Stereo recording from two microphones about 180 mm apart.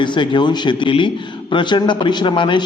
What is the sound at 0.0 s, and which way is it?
A man's voice, 25° left (ahead or behind).